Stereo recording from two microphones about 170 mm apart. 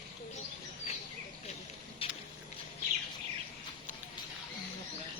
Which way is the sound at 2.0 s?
35° left (ahead or behind).